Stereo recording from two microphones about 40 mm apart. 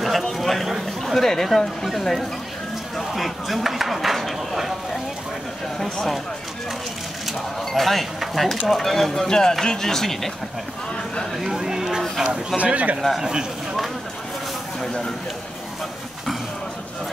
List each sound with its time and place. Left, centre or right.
0.4 s a sound: centre
1.9 s speech: centre
7.7 s speech: centre
11.4 s speech: centre
12.5 s speech: right
13.2 s speech: centre